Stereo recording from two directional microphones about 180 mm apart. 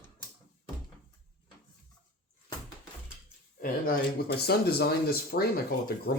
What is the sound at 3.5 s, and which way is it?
Speech, 50° left (ahead or behind).